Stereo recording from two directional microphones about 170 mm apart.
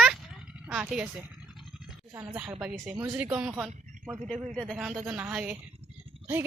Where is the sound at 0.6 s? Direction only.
5° right (ahead or behind).